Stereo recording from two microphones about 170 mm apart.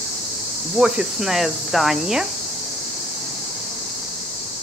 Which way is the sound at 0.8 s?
5° right (ahead or behind).